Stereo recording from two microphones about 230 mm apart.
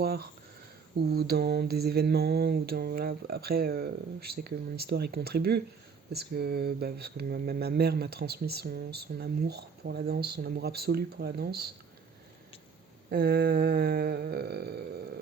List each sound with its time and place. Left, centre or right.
0.0 s speech: right
1.1 s mantra: right
13.1 s mantra: right